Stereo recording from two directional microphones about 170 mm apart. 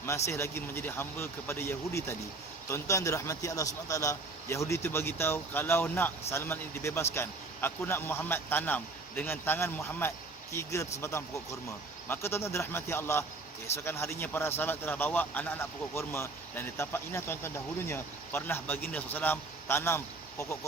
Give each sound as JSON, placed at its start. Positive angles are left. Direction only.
{"t": 0.0, "sound": "speech", "side_deg": 15}
{"t": 12.0, "sound": "speech", "side_deg": 15}